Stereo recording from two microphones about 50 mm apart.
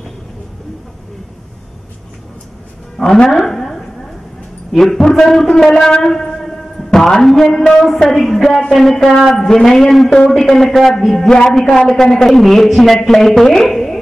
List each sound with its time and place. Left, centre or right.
3.0 s speech: centre
3.3 s a sound: centre
4.7 s a man's voice: centre
11.2 s a man's voice: centre